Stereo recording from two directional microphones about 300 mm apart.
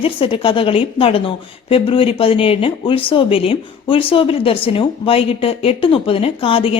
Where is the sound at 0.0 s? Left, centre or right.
Centre.